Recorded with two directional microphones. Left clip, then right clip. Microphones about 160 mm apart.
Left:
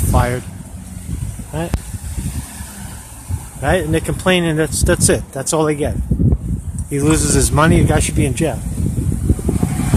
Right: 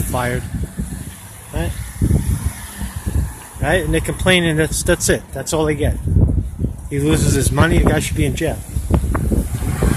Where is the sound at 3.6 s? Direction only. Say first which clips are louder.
Left 1 dB; 5° left (ahead or behind).